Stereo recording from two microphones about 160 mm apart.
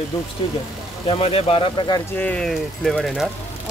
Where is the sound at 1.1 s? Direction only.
35° left (ahead or behind).